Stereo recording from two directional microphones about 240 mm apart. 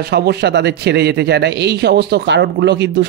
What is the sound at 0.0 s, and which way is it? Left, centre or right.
A man's voice, right.